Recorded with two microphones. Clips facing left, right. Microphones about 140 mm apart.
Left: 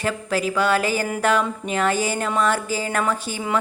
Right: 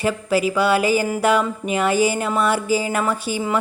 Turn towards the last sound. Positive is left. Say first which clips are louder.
# right 2 dB
turn(degrees=-10)  # may be behind; listen again after turning